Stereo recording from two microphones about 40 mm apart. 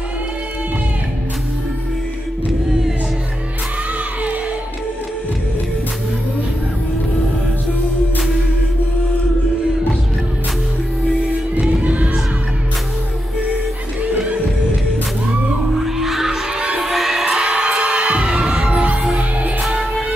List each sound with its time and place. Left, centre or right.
11.7 s music: right
15.8 s music: centre
16.5 s music: right
16.8 s music: centre
17.6 s music: right
19.7 s music: centre